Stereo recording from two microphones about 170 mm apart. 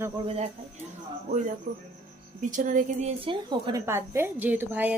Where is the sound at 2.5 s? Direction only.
50° right (ahead or behind).